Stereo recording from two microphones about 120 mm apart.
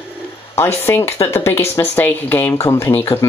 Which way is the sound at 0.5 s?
20° left (ahead or behind).